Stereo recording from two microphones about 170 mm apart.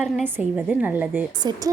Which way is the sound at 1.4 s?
25° right (ahead or behind).